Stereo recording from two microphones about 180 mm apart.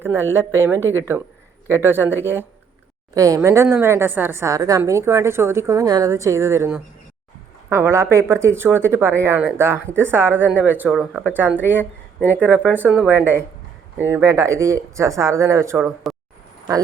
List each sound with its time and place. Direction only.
0.0 s a woman's voice: 10° right (ahead or behind)
3.2 s a woman's voice: 20° right (ahead or behind)